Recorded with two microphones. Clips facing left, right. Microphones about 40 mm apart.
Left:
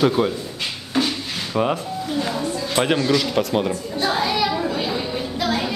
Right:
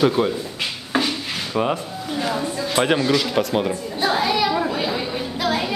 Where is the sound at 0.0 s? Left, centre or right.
Centre.